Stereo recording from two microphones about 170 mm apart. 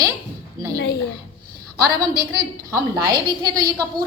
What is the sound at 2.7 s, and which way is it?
A woman's voice, 20° right (ahead or behind).